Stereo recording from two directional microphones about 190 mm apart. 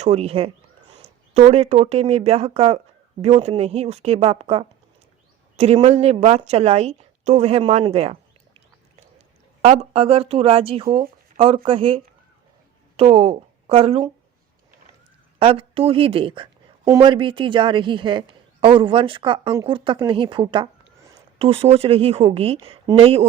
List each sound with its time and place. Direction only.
0.0 s a woman's voice: 35° right (ahead or behind)
15.4 s a woman's voice: 30° right (ahead or behind)